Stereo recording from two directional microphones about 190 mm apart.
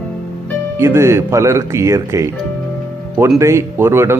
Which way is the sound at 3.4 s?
15° right (ahead or behind).